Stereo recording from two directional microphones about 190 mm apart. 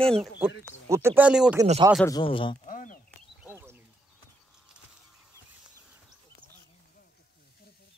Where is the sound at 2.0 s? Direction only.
25° left (ahead or behind); by 3.0 s 45° left (ahead or behind).